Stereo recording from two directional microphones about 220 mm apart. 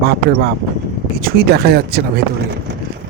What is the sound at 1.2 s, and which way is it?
Speech, 45° right (ahead or behind).